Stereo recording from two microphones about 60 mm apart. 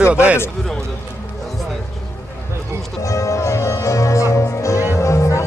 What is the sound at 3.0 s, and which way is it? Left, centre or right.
Music, left.